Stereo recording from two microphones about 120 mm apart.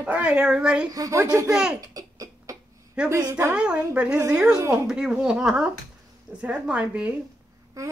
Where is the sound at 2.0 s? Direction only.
30° right (ahead or behind).